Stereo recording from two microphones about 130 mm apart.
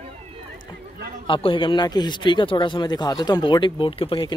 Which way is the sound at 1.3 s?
40° left (ahead or behind).